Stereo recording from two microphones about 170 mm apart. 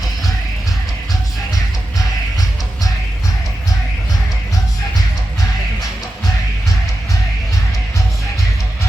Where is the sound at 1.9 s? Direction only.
20° left (ahead or behind).